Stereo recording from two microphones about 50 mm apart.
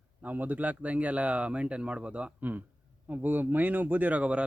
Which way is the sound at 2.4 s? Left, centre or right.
Right.